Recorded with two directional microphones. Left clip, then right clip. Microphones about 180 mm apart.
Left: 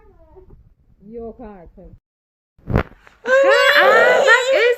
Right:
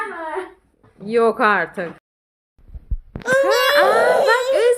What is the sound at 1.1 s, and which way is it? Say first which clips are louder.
Speech: right 19 dB; 55° right (ahead or behind).